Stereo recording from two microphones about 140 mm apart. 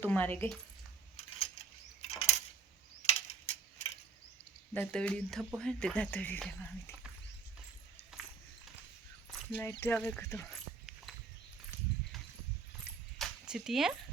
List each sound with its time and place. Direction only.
0.0 s speech: 10° left (ahead or behind)
1.1 s a sound: 45° left (ahead or behind)
4.7 s speech: 10° left (ahead or behind)
9.6 s speech: 15° left (ahead or behind)
10.0 s speech: 5° left (ahead or behind)
10.2 s speech: 20° left (ahead or behind)
10.5 s dog: centre (ahead or behind)
13.1 s a sound: centre (ahead or behind)